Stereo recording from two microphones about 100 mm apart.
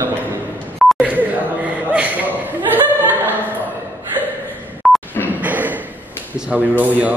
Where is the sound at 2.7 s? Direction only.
20° right (ahead or behind).